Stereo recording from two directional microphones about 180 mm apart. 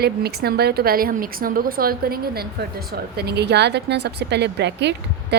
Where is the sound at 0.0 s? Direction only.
60° right (ahead or behind).